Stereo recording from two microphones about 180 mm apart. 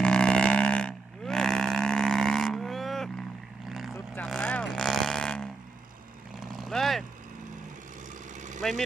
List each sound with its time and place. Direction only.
0.0 s livestock: 5° left (ahead or behind)
3.7 s vehicle: centre (ahead or behind)
3.9 s vehicle: 10° left (ahead or behind)
4.3 s a sound: 5° left (ahead or behind)
6.4 s vehicle: centre (ahead or behind)
8.4 s engine: 45° right (ahead or behind)